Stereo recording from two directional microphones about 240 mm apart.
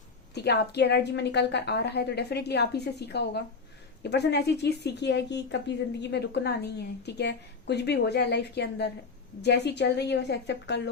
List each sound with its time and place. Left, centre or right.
0.3 s speech: left